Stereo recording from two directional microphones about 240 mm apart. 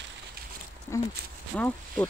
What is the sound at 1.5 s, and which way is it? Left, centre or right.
Speech, centre.